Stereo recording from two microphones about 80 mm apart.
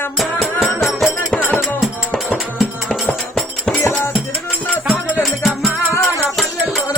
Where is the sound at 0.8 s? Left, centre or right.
Centre.